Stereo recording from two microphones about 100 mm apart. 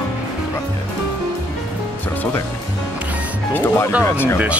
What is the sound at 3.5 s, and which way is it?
Speech, 20° left (ahead or behind).